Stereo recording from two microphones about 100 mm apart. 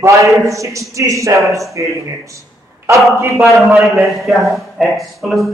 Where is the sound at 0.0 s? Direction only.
30° right (ahead or behind).